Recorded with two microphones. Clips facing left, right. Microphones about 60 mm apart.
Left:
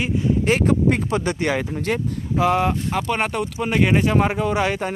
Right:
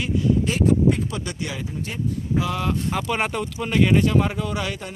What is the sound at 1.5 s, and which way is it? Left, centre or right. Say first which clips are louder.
Speech: left 9 dB; left.